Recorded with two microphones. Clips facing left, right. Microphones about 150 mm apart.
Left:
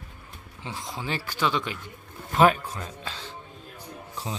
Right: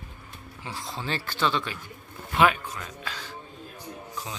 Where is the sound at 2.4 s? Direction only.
35° left (ahead or behind).